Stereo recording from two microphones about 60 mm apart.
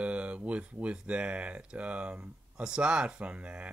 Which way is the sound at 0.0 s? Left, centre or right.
Right.